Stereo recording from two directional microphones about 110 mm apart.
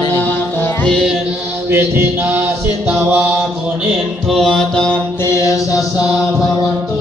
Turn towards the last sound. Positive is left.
turn(degrees=30)  # may be behind; listen again after turning